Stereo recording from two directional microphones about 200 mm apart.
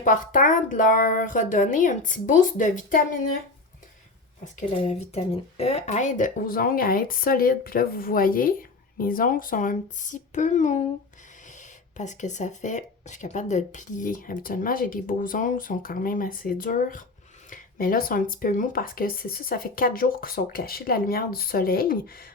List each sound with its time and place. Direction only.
0.0 s speech: 40° left (ahead or behind)
4.5 s speech: 35° left (ahead or behind); by 22.3 s 50° left (ahead or behind)